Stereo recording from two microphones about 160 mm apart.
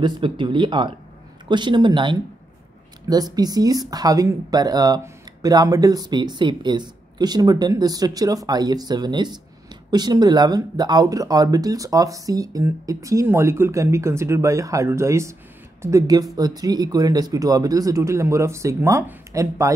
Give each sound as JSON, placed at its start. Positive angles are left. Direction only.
{"t": 0.0, "sound": "speech", "side_deg": -30}